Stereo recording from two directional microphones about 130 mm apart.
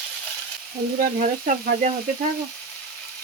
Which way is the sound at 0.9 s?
80° right.